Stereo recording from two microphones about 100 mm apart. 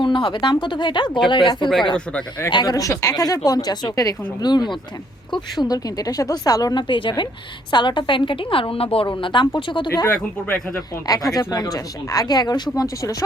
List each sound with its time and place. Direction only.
0.0 s speech: 55° left (ahead or behind); by 6.8 s 40° left (ahead or behind)
6.8 s a woman's voice: 55° left (ahead or behind)
11.0 s speech: 40° left (ahead or behind)